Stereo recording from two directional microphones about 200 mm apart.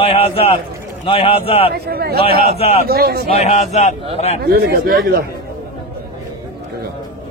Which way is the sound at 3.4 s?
35° left (ahead or behind).